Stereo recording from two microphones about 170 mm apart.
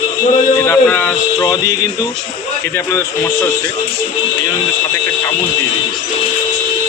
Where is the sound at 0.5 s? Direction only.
15° left (ahead or behind).